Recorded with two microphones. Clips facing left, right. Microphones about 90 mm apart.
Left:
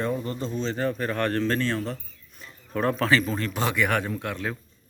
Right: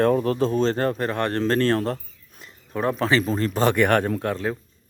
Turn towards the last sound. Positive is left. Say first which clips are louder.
# right 6 dB
turn(degrees=-35)  # may be behind; listen again after turning